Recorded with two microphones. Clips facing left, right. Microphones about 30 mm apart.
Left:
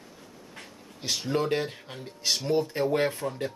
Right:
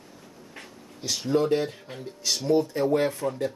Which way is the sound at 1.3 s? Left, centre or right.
Left.